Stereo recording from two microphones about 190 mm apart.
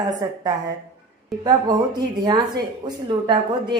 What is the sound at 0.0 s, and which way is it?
A woman's voice, 20° right (ahead or behind).